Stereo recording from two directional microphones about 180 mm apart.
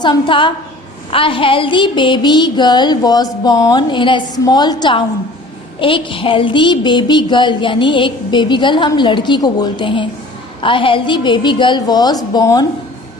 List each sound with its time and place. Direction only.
0.0 s speech: 25° left (ahead or behind)